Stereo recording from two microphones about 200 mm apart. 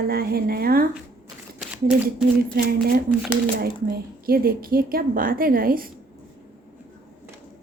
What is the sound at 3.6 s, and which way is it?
A woman's voice, 50° right (ahead or behind).